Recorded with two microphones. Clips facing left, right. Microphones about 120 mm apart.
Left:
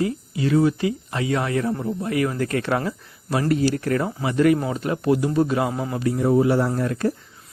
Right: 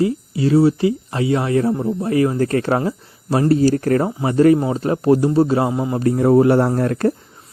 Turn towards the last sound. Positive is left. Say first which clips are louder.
# right 5 dB
turn(degrees=-50)  # may be behind; listen again after turning